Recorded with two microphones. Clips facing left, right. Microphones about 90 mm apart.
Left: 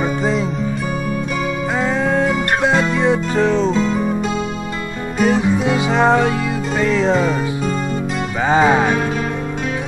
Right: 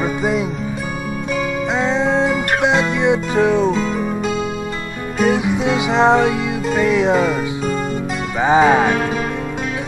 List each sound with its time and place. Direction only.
0.0 s music: 10° right (ahead or behind)
1.8 s music: 20° right (ahead or behind)
5.2 s music: 15° right (ahead or behind)
6.8 s speech: 10° right (ahead or behind)
8.4 s music: 15° right (ahead or behind)
8.6 s music: centre (ahead or behind)